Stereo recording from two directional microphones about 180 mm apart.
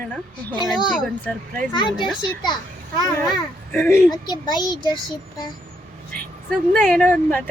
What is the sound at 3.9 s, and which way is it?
Speech, 20° left (ahead or behind).